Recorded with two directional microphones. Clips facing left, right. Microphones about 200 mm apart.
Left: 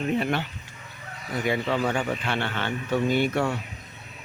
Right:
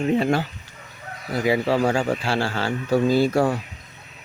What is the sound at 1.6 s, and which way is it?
Speech, 35° right (ahead or behind).